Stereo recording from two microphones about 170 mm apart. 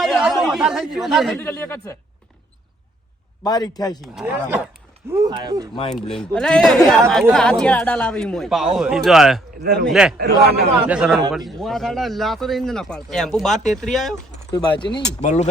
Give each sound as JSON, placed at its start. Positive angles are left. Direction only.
{"t": 0.0, "sound": "speech", "side_deg": 0}
{"t": 1.4, "sound": "speech", "side_deg": 10}
{"t": 3.4, "sound": "a man's voice", "side_deg": 25}
{"t": 4.0, "sound": "a man's voice", "side_deg": 0}
{"t": 5.3, "sound": "speech", "side_deg": -25}
{"t": 6.1, "sound": "a man's voice", "side_deg": 5}
{"t": 10.2, "sound": "a man's voice", "side_deg": -70}
{"t": 10.8, "sound": "a man's voice", "side_deg": -5}
{"t": 14.5, "sound": "a man's voice", "side_deg": 25}
{"t": 15.2, "sound": "speech", "side_deg": 45}